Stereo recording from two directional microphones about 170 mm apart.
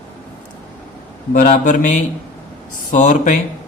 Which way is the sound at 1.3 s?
50° left (ahead or behind).